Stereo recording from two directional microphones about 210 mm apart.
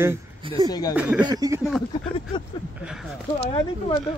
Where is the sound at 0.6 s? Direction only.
20° left (ahead or behind).